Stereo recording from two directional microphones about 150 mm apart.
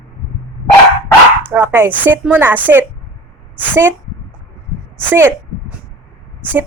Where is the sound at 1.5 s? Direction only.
15° right (ahead or behind).